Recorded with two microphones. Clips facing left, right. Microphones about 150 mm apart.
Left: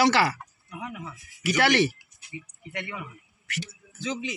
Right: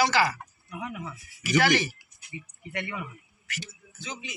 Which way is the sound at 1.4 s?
65° left (ahead or behind).